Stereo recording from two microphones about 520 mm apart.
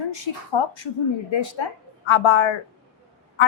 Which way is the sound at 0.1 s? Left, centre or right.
Left.